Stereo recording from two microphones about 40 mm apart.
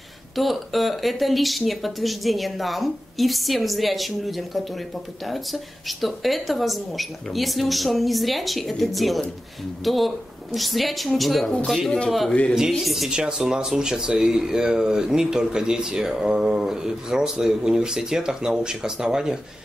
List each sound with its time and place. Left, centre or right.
0.4 s speech: centre
13.1 s speech: centre
16.3 s mantra: right
16.6 s speech: centre